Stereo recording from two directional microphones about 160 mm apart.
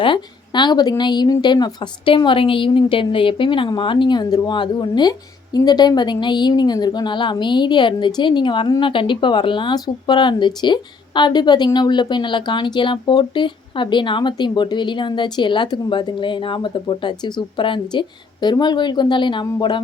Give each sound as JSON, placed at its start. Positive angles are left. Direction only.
{"t": 0.0, "sound": "speech", "side_deg": 30}